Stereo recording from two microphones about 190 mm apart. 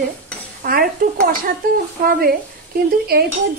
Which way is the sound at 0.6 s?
45° right (ahead or behind).